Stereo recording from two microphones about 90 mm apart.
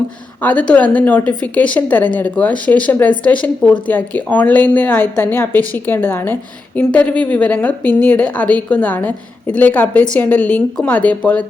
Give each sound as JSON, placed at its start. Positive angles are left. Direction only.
{"t": 0.4, "sound": "a woman's voice", "side_deg": 15}